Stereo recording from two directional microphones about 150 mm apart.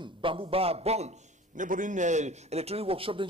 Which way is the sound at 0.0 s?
35° right (ahead or behind).